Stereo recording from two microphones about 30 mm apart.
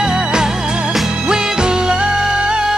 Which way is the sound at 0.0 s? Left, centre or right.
Right.